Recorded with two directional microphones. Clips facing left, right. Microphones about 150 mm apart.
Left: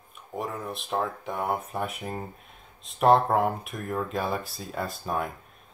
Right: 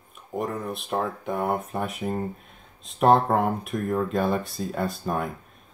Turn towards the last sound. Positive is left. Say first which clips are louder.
# right 3 dB
turn(degrees=0)  # may be behind; listen again after turning